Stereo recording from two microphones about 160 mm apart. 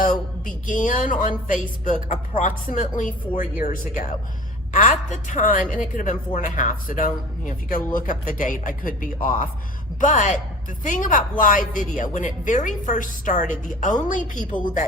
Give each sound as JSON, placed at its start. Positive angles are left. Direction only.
{"t": 0.0, "sound": "a woman's voice", "side_deg": 60}